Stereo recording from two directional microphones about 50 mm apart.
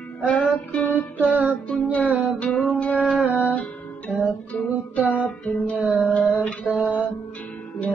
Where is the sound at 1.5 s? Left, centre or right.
Left.